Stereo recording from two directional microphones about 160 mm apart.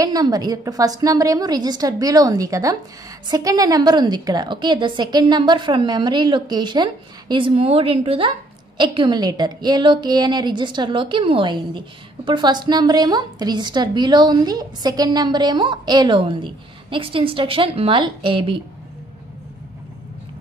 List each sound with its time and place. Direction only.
0.0 s a woman's voice: 25° right (ahead or behind)